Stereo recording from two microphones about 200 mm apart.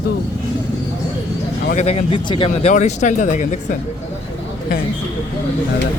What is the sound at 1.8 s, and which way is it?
Speech, 30° left (ahead or behind).